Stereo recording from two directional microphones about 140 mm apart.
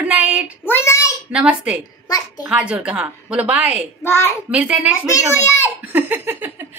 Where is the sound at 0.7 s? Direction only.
20° left (ahead or behind).